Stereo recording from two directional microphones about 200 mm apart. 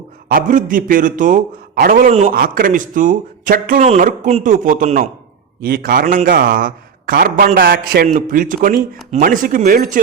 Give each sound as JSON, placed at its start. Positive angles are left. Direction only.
{"t": 0.3, "sound": "a man's voice", "side_deg": -45}
{"t": 8.0, "sound": "a man's voice", "side_deg": -40}